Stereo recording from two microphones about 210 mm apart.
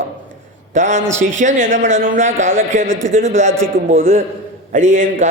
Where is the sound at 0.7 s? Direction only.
35° right (ahead or behind).